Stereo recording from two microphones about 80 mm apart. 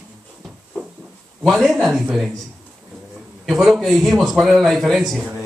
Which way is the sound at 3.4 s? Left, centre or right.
Centre.